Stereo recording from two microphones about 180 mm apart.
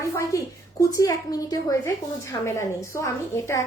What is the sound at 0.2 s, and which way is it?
A woman's voice, 15° left (ahead or behind).